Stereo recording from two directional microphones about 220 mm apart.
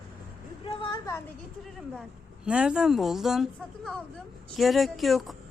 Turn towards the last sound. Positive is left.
turn(degrees=0)  # may be behind; listen again after turning